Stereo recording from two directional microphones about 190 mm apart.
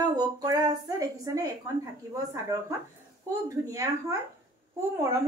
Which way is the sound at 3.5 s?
15° right (ahead or behind).